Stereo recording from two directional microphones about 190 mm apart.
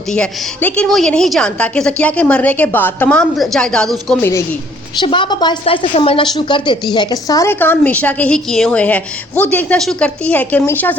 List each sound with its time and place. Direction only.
0.1 s a woman's voice: 5° left (ahead or behind)
4.9 s a woman's voice: 25° left (ahead or behind); by 10.9 s 10° left (ahead or behind)